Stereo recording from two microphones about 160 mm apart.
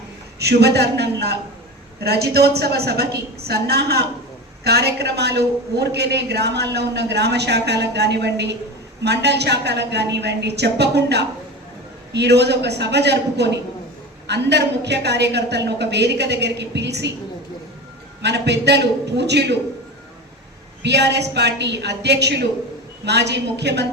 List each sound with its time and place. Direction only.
0.3 s a woman's voice: 90° right
18.2 s a woman's voice: 90° right
20.8 s a woman's voice: 90° right